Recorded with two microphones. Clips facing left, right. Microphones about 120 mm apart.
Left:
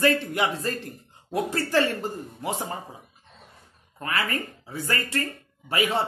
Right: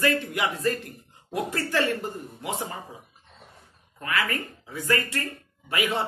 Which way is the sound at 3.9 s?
30° left (ahead or behind).